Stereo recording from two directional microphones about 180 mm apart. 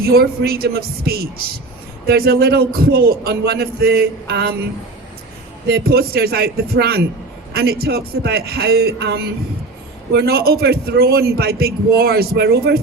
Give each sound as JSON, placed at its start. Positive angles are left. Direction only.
{"t": 0.0, "sound": "a man's voice", "side_deg": -60}
{"t": 5.6, "sound": "a man's voice", "side_deg": -60}